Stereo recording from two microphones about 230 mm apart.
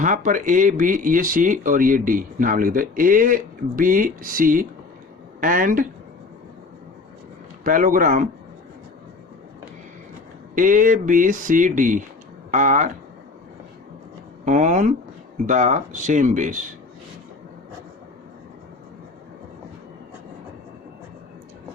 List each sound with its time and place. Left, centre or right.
0.0 s a woman's voice: right
7.6 s speech: right
10.5 s speech: right
14.4 s speech: right